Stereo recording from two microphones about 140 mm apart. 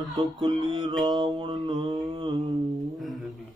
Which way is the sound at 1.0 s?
30° right (ahead or behind).